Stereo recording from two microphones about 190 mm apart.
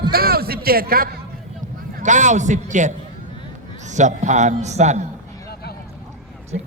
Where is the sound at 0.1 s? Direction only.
55° right (ahead or behind).